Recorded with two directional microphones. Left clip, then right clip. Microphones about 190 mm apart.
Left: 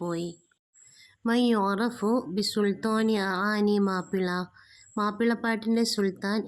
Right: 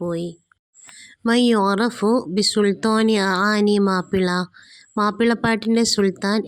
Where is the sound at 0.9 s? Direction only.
40° right (ahead or behind).